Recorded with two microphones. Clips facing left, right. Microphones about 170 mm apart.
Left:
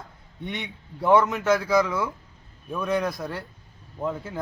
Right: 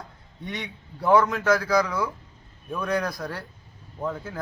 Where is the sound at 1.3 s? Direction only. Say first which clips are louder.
Even; 25° left (ahead or behind).